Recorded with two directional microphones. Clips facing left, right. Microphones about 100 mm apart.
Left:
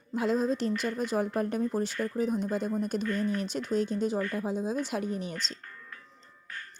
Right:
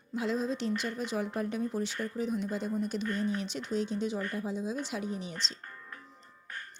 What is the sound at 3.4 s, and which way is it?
A woman's voice, 45° left (ahead or behind).